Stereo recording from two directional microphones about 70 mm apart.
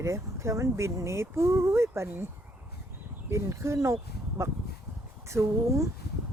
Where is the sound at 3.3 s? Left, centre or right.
Right.